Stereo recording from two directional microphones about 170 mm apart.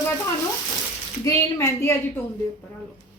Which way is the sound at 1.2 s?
15° left (ahead or behind).